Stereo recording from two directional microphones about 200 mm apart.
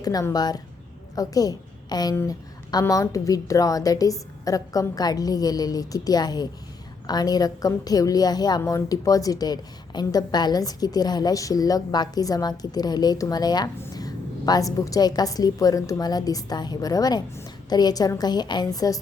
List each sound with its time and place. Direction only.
0.0 s a woman's voice: 20° left (ahead or behind)